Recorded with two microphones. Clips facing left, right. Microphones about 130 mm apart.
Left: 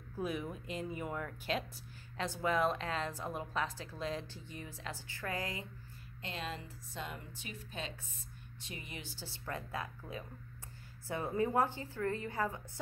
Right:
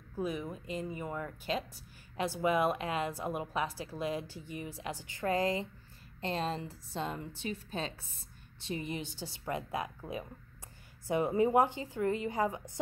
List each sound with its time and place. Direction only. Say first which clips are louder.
0.2 s speech: right 2 dB; centre (ahead or behind)
2.1 s a woman's voice: right 4 dB; 10° right (ahead or behind)